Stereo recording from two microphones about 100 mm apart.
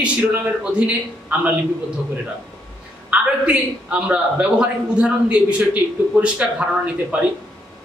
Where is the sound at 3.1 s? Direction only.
10° right (ahead or behind).